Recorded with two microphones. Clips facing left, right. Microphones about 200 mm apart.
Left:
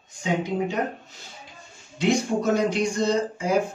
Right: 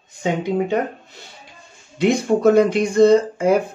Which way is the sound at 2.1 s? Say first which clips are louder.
Right 7 dB; 55° right (ahead or behind).